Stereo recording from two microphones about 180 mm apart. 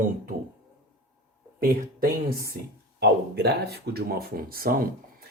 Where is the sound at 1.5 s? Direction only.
55° right (ahead or behind).